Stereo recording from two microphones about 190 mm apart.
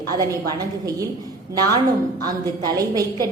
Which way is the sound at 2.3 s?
20° right (ahead or behind).